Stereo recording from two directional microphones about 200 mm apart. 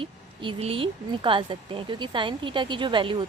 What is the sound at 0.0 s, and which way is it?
Speech, 25° right (ahead or behind).